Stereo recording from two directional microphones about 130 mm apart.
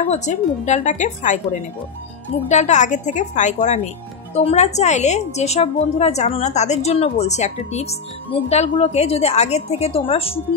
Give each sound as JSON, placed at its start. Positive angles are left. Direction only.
{"t": 0.0, "sound": "speech", "side_deg": 65}
{"t": 2.4, "sound": "a woman's voice", "side_deg": 60}